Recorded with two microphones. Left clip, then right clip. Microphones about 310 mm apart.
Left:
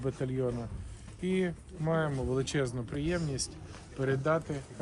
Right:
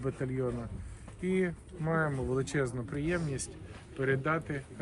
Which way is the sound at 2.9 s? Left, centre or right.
Centre.